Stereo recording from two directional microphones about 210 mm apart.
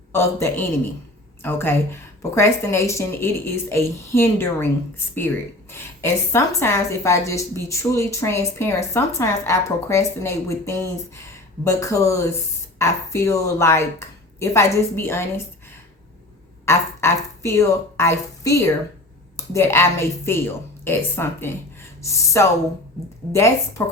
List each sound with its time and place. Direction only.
0.1 s a woman's voice: 10° left (ahead or behind)
5.7 s a woman's voice: 10° left (ahead or behind)
16.6 s a woman's voice: 15° left (ahead or behind)